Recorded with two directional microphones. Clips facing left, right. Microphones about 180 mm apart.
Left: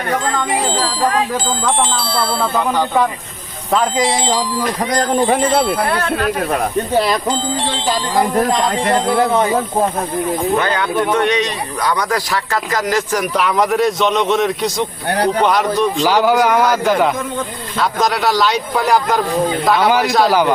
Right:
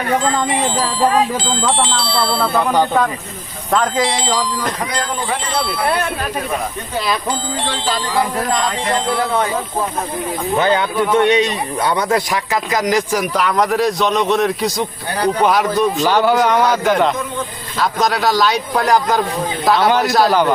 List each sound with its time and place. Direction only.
1.8 s speech: 45° left (ahead or behind)
3.7 s a man's voice: 5° left (ahead or behind)
4.9 s speech: 45° left (ahead or behind)
7.7 s music: 20° left (ahead or behind)
10.6 s speech: 25° right (ahead or behind)
13.3 s speech: centre (ahead or behind)
16.0 s a man's voice: 10° left (ahead or behind)